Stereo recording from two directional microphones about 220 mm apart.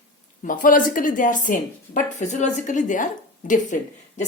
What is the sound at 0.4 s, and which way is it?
A woman's voice, 40° left (ahead or behind).